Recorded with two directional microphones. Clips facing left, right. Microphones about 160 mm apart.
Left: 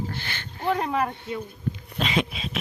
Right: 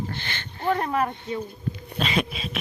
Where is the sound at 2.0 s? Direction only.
15° left (ahead or behind).